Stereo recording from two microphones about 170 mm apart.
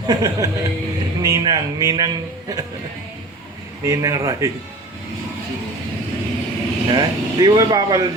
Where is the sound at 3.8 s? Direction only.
20° right (ahead or behind).